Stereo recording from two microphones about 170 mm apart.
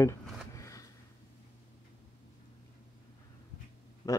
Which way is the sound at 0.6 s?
20° left (ahead or behind).